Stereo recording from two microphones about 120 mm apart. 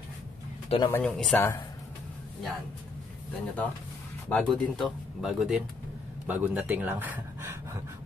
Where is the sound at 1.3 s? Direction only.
25° left (ahead or behind).